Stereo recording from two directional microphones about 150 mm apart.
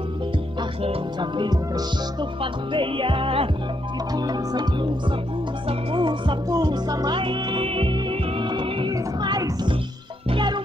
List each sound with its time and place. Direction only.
2.4 s music: 35° right (ahead or behind)
4.1 s music: 25° right (ahead or behind)
5.7 s music: 30° right (ahead or behind)